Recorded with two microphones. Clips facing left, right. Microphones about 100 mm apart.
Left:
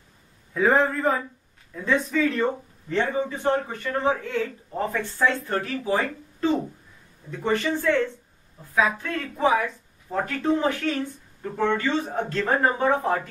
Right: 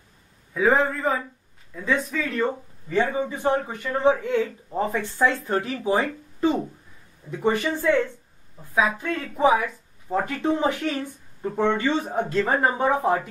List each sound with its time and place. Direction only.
0.6 s a man's voice: centre (ahead or behind); by 6.0 s 20° right (ahead or behind)
7.2 s speech: 15° right (ahead or behind)